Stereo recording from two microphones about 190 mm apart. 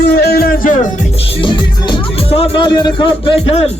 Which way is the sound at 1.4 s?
30° left (ahead or behind).